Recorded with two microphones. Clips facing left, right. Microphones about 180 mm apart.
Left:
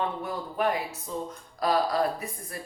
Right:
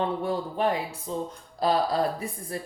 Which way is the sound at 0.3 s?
30° right (ahead or behind).